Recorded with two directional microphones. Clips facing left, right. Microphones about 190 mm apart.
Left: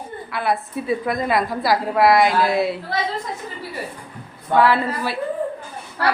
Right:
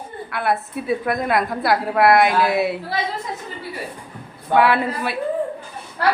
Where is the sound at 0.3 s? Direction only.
Centre (ahead or behind).